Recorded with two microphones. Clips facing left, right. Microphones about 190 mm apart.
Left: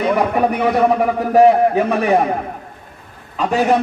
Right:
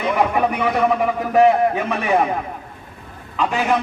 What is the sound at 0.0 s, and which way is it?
A man's voice, 35° left (ahead or behind).